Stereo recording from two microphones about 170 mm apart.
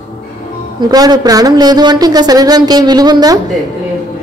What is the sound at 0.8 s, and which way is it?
Speech, 25° right (ahead or behind).